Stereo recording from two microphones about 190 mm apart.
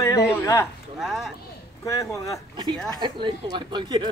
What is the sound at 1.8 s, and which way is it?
Speech, 15° left (ahead or behind).